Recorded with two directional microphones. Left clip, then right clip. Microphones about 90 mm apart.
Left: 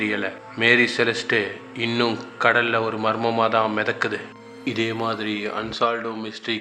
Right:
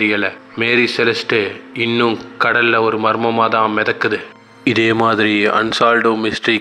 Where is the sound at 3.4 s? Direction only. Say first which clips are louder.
Right 5 dB; 45° right (ahead or behind).